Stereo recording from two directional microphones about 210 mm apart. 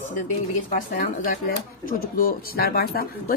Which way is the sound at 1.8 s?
40° left (ahead or behind).